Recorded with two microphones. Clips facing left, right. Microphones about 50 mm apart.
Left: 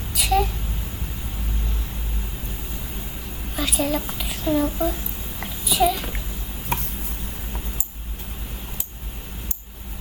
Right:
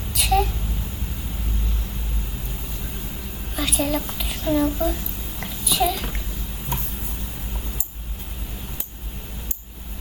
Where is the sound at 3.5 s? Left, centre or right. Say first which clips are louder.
Even; centre.